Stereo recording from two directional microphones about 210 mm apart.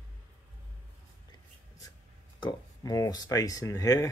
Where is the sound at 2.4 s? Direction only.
20° left (ahead or behind).